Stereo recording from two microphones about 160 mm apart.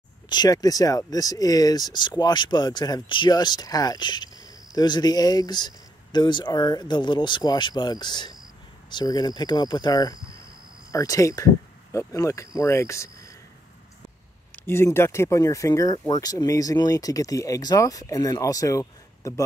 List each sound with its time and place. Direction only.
0.3 s speech: 25° left (ahead or behind)
14.5 s speech: 15° left (ahead or behind)